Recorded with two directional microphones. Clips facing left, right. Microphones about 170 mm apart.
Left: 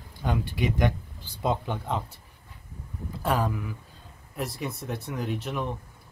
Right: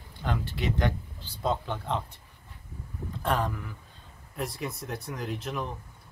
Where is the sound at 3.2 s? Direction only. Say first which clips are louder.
Left 2 dB; 5° left (ahead or behind).